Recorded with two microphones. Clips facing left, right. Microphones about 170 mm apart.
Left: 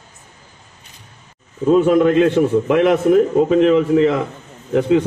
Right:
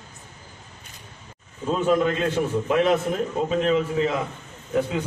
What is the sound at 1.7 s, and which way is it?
A man's voice, 55° left (ahead or behind).